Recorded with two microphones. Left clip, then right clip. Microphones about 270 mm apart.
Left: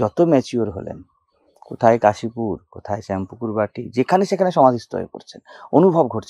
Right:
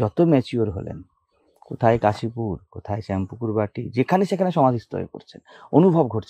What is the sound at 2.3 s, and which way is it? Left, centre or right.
Speech, right.